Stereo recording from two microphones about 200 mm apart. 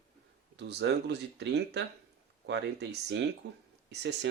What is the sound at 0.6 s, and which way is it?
Speech, 60° right (ahead or behind).